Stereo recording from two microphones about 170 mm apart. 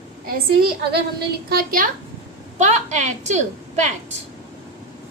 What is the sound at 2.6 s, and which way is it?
A woman's voice, 45° right (ahead or behind).